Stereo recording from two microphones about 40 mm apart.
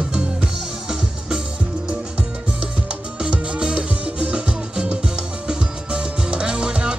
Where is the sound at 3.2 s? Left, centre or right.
Right.